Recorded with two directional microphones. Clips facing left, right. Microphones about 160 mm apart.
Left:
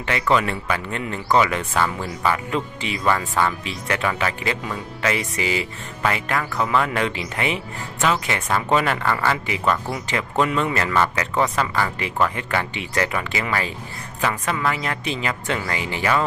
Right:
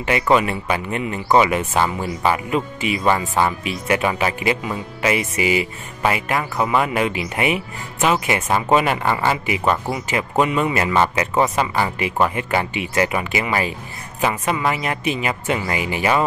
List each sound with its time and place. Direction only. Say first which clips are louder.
0.0 s speech: right 3 dB; 20° right (ahead or behind)